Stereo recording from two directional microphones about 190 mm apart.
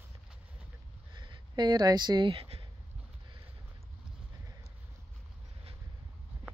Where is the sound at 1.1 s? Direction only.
25° right (ahead or behind).